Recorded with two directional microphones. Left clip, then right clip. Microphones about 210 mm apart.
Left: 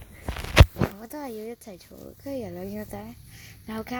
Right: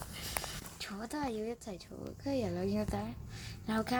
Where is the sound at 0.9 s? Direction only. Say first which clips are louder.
Left 2 dB; 20° left (ahead or behind).